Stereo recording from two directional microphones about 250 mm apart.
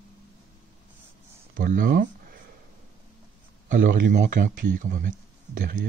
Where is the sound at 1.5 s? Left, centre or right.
Right.